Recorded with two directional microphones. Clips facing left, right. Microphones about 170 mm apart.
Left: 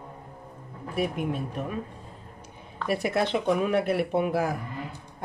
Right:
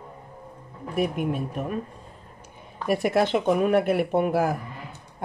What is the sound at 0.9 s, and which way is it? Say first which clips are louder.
Speech: right 3 dB; 50° right (ahead or behind).